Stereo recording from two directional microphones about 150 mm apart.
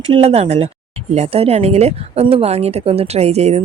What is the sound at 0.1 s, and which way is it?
Speech, 40° right (ahead or behind).